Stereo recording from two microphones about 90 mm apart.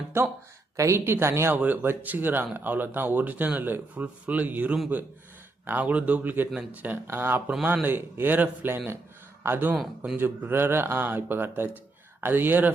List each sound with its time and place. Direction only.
0.8 s speech: 30° right (ahead or behind)